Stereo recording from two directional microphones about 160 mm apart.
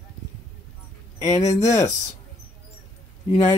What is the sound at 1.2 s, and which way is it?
Speech, 20° left (ahead or behind).